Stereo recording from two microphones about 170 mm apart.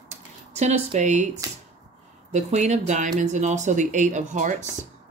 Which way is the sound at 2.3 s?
45° right (ahead or behind).